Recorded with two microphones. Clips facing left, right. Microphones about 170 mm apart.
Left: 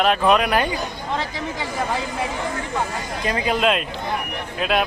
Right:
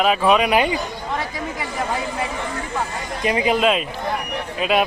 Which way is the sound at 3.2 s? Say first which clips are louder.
Right 4 dB; 15° right (ahead or behind).